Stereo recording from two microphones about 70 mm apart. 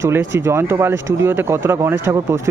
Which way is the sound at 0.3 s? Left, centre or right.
Right.